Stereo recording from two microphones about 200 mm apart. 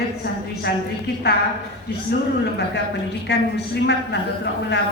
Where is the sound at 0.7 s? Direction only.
55° left (ahead or behind).